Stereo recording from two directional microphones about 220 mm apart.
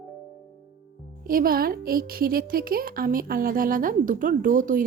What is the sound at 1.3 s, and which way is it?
Speech, 40° right (ahead or behind).